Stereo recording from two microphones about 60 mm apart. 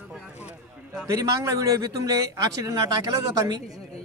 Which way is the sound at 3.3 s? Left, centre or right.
Right.